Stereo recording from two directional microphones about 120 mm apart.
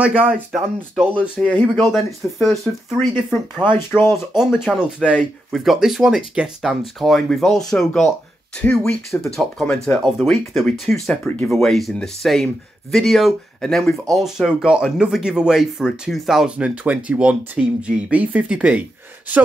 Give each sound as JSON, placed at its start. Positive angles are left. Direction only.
{"t": 0.0, "sound": "speech", "side_deg": -10}
{"t": 3.7, "sound": "speech", "side_deg": 20}
{"t": 4.4, "sound": "speech", "side_deg": -5}